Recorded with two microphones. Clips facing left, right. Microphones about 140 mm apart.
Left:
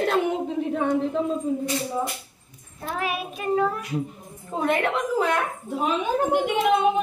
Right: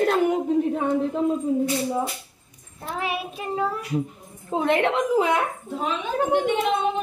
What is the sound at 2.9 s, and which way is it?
A woman's voice, 25° right (ahead or behind).